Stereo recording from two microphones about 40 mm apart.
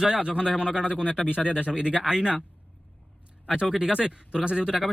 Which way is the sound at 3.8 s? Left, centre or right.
Right.